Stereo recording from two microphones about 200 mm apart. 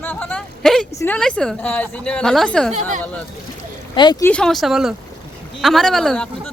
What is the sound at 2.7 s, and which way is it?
Speech, 40° right (ahead or behind).